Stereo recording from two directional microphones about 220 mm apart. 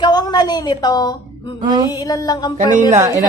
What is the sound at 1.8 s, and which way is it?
Music, 15° left (ahead or behind).